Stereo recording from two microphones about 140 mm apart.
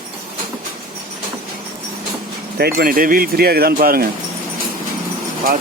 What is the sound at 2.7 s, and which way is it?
Speech, 90° right.